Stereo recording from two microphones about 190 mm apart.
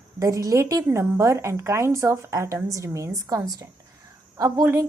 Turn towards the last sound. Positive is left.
turn(degrees=-15)  # may be behind; listen again after turning